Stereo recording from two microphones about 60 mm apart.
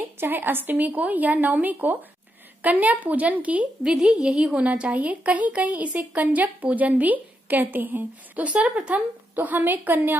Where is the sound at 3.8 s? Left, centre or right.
Centre.